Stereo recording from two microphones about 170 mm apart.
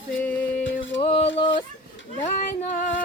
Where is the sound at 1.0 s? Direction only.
35° left (ahead or behind).